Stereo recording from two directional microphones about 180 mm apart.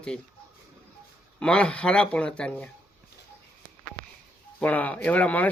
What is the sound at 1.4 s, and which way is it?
Speech, 5° left (ahead or behind).